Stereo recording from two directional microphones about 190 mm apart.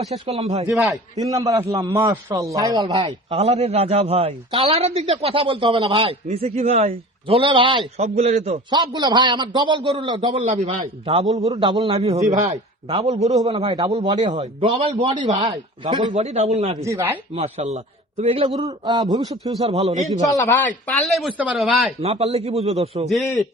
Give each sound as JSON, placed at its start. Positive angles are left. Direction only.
{"t": 0.1, "sound": "a man's voice", "side_deg": -35}
{"t": 0.7, "sound": "speech", "side_deg": 0}
{"t": 1.2, "sound": "a man's voice", "side_deg": -15}
{"t": 10.4, "sound": "a man's voice", "side_deg": -40}
{"t": 13.9, "sound": "a man's voice", "side_deg": -20}
{"t": 14.3, "sound": "a man's voice", "side_deg": -35}
{"t": 16.1, "sound": "a man's voice", "side_deg": -35}
{"t": 16.8, "sound": "speech", "side_deg": -15}
{"t": 17.3, "sound": "a man's voice", "side_deg": -35}
{"t": 19.6, "sound": "a man's voice", "side_deg": -35}
{"t": 20.2, "sound": "speech", "side_deg": 15}
{"t": 22.0, "sound": "a man's voice", "side_deg": -30}
{"t": 23.0, "sound": "speech", "side_deg": 0}